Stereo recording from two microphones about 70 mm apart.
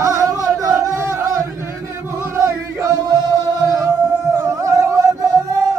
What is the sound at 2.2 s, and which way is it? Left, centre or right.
Music, right.